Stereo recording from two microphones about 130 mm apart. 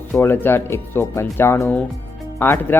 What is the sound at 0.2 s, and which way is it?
Speech, 15° left (ahead or behind).